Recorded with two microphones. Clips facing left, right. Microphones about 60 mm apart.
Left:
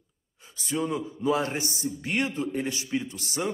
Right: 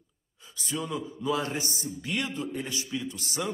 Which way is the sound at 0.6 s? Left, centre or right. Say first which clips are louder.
Left 4 dB; left.